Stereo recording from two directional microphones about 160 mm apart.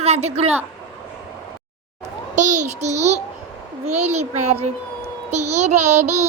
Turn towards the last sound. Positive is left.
turn(degrees=-45)  # may be behind; listen again after turning